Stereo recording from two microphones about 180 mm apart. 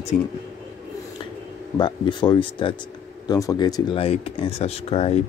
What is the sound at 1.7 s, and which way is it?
Speech, 25° left (ahead or behind).